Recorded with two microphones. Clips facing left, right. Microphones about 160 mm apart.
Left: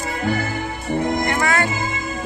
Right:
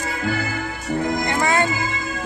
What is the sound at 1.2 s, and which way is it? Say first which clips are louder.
Music: even; 20° right (ahead or behind).